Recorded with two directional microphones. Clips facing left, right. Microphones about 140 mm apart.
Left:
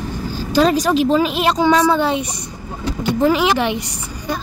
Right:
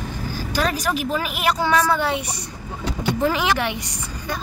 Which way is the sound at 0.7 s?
25° left (ahead or behind).